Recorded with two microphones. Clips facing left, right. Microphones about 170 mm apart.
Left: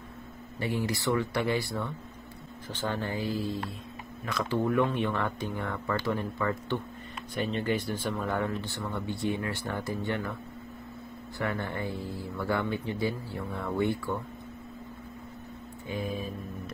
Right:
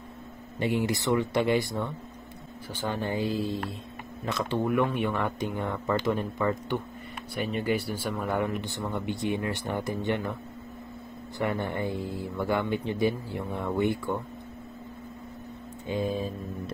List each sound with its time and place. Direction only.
0.6 s speech: 20° right (ahead or behind)
4.8 s speech: 10° right (ahead or behind)
11.3 s speech: 20° right (ahead or behind)
15.9 s speech: 25° right (ahead or behind)